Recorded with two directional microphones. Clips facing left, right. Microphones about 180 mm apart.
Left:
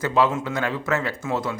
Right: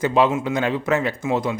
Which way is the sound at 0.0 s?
20° right (ahead or behind).